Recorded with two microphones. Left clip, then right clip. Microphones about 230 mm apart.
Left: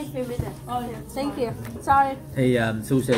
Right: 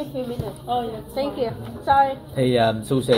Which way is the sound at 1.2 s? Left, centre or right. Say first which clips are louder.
Right 3 dB; left.